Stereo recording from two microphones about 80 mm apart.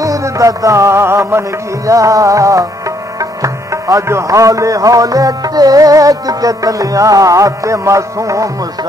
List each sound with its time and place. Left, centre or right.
0.0 s music: right
1.9 s music: right